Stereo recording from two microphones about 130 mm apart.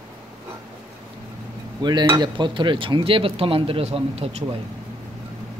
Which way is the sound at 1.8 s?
35° right (ahead or behind).